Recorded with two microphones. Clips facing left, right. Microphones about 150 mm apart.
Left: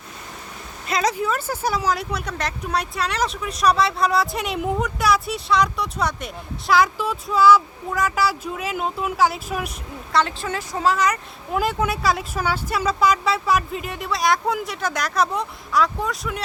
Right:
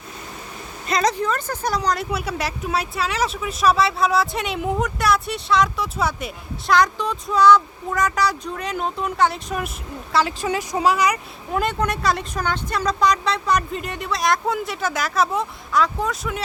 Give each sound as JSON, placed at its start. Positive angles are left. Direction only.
{"t": 0.9, "sound": "speech", "side_deg": 5}
{"t": 10.4, "sound": "speech", "side_deg": -15}
{"t": 11.5, "sound": "speech", "side_deg": 5}